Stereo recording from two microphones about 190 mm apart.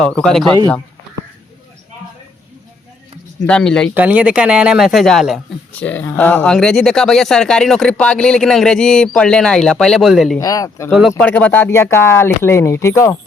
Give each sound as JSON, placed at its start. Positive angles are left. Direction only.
{"t": 0.0, "sound": "speech", "side_deg": 5}
{"t": 3.4, "sound": "speech", "side_deg": 5}
{"t": 3.9, "sound": "speech", "side_deg": -10}
{"t": 10.3, "sound": "speech", "side_deg": 20}